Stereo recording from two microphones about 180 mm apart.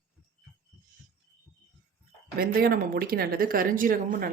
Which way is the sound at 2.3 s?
55° right (ahead or behind).